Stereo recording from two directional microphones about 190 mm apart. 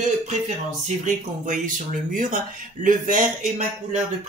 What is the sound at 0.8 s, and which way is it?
Speech, 40° right (ahead or behind).